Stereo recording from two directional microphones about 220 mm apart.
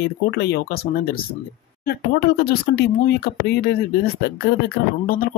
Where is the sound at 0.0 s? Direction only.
50° left (ahead or behind).